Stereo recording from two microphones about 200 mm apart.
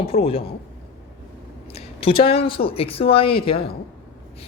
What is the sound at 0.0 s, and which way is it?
Speech, 30° left (ahead or behind).